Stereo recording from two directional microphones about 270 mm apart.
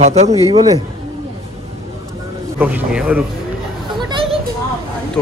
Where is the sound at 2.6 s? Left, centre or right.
Centre.